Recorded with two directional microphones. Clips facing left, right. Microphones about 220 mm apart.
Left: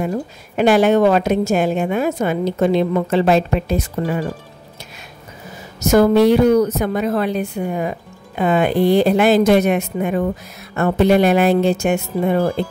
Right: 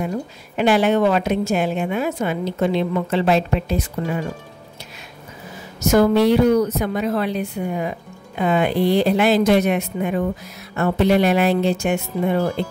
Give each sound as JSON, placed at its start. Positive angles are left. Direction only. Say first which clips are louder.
{"t": 0.6, "sound": "a woman's voice", "louder": "left 4 dB", "side_deg": 45}
{"t": 5.8, "sound": "a woman's voice", "louder": "left 3 dB", "side_deg": 45}